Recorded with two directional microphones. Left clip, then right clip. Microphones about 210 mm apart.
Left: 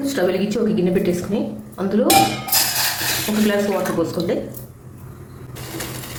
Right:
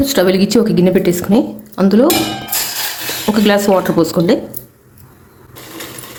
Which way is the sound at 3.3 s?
60° right (ahead or behind).